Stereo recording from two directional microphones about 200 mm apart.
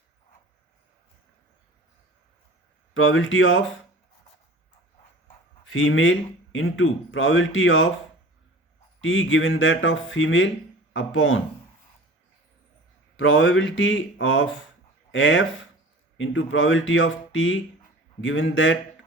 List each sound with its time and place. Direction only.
2.9 s speech: 80° left
5.6 s speech: 80° left
9.0 s speech: 75° left (ahead or behind)
13.1 s speech: 75° left (ahead or behind)